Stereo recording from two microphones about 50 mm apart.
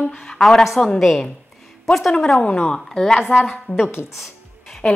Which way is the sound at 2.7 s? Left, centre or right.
Centre.